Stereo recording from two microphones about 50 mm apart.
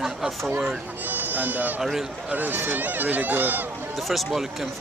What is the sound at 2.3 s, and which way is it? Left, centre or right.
Speech, right.